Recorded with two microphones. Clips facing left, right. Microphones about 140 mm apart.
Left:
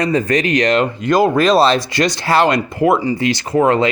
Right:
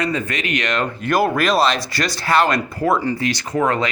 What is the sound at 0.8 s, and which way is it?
Speech, 15° left (ahead or behind).